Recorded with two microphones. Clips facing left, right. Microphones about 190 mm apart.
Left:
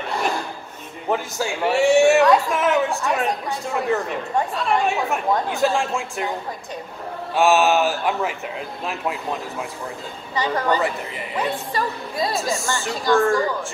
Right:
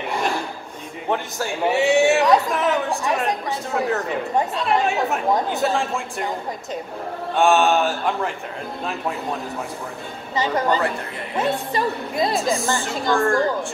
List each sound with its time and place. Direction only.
1.0 s a man's voice: centre (ahead or behind)
7.3 s a man's voice: 5° left (ahead or behind)
10.3 s a woman's voice: 20° right (ahead or behind)
12.4 s a man's voice: centre (ahead or behind)